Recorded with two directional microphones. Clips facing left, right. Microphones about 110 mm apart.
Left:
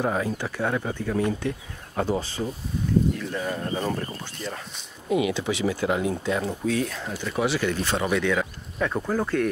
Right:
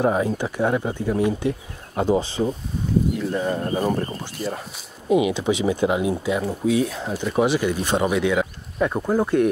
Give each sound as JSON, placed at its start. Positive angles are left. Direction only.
{"t": 0.0, "sound": "speech", "side_deg": -15}
{"t": 6.2, "sound": "speech", "side_deg": -5}